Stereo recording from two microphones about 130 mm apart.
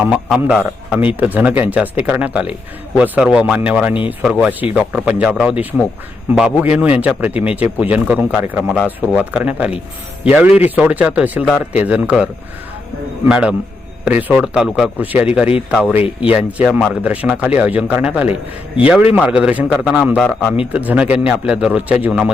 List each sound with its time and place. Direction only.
0.0 s a man's voice: 5° right (ahead or behind)
16.0 s speech: 45° left (ahead or behind)
16.3 s speech: 10° right (ahead or behind)